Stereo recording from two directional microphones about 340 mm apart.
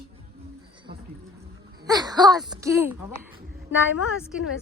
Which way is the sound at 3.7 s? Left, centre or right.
Left.